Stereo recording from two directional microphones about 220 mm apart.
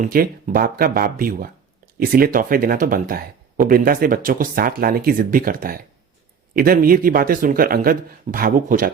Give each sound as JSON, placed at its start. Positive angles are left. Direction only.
{"t": 0.0, "sound": "speech", "side_deg": -40}